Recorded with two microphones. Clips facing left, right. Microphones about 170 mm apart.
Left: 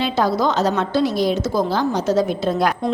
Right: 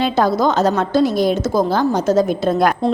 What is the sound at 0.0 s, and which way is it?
A woman's voice, 50° right (ahead or behind).